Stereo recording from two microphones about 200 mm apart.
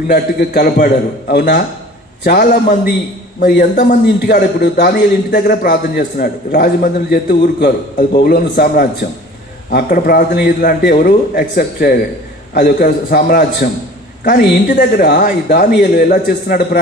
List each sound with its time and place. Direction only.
0.1 s a man's voice: 50° left (ahead or behind)